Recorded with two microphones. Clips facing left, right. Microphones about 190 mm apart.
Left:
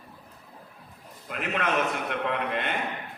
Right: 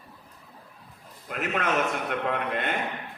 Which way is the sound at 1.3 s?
45° right (ahead or behind).